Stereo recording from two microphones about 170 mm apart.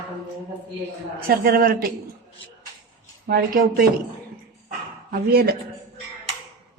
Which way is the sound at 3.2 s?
60° right (ahead or behind).